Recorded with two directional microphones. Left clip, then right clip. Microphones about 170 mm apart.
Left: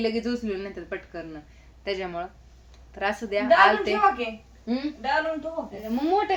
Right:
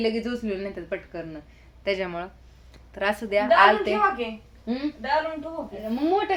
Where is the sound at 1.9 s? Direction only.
35° right (ahead or behind).